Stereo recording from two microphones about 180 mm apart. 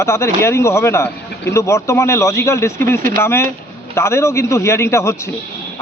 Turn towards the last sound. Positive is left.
turn(degrees=15)  # may be behind; listen again after turning